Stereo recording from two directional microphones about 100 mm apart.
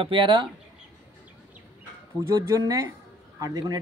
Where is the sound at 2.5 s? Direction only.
35° right (ahead or behind).